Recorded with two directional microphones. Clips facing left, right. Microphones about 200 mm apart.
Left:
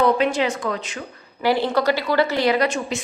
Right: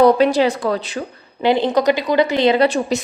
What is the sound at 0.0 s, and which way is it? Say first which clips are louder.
A woman's voice: right 6 dB; 35° right (ahead or behind).